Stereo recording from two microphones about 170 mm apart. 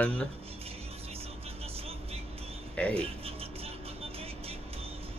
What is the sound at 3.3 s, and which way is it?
Vehicle, 35° right (ahead or behind).